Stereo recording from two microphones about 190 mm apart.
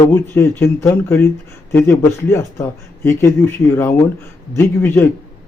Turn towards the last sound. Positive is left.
turn(degrees=15)  # may be behind; listen again after turning